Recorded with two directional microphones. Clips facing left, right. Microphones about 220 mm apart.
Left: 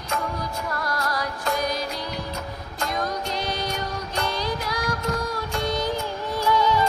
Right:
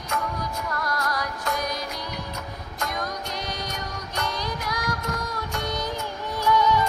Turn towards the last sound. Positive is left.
turn(degrees=30)  # may be behind; listen again after turning